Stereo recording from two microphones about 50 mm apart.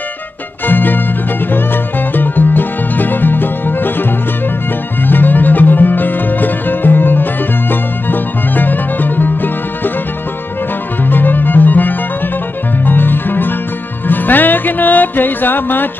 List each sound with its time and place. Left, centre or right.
0.7 s music: left
11.1 s music: left